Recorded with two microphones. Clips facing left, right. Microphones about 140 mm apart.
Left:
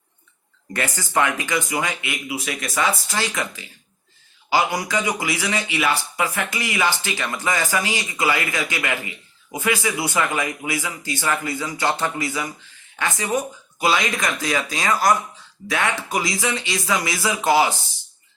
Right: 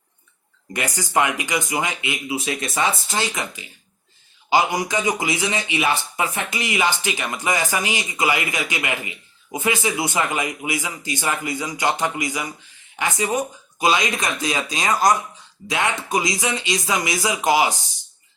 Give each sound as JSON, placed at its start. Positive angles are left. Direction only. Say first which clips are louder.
{"t": 0.7, "sound": "a man's voice", "louder": "right 1 dB", "side_deg": -15}